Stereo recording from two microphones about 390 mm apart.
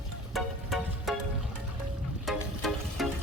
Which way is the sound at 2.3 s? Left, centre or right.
Centre.